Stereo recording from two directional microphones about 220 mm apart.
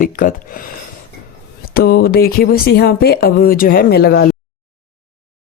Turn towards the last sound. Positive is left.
turn(degrees=45)  # may be behind; listen again after turning